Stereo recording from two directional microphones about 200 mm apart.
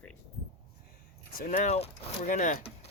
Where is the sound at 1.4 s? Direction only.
45° left (ahead or behind).